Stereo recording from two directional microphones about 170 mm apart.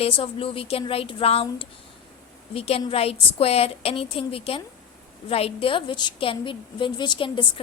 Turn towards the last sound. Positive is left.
turn(degrees=30)  # may be behind; listen again after turning